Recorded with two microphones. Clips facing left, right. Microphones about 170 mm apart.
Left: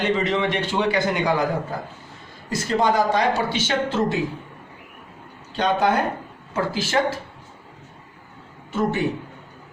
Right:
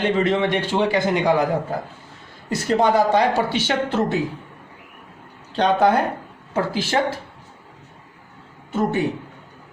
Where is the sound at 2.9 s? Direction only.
30° right (ahead or behind).